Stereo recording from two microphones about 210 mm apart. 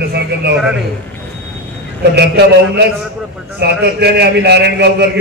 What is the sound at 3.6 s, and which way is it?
A man's voice, 50° right (ahead or behind).